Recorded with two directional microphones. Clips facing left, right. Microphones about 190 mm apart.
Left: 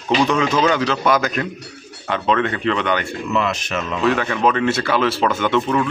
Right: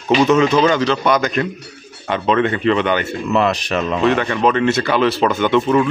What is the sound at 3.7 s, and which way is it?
Speech, 35° right (ahead or behind).